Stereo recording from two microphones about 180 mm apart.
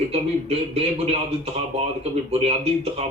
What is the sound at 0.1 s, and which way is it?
Speech, 35° right (ahead or behind).